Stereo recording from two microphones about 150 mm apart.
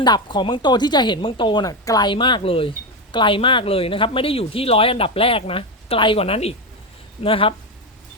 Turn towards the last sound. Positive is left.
turn(degrees=35)  # may be behind; listen again after turning